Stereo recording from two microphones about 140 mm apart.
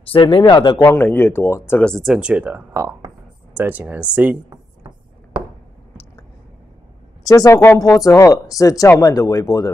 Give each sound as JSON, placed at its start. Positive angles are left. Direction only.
{"t": 0.0, "sound": "speech", "side_deg": 40}
{"t": 0.8, "sound": "speech", "side_deg": 15}
{"t": 1.9, "sound": "speech", "side_deg": 5}
{"t": 2.1, "sound": "speech", "side_deg": -10}
{"t": 7.2, "sound": "speech", "side_deg": 25}